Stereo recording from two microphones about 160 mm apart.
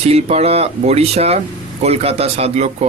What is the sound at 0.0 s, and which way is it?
Speech, 40° right (ahead or behind).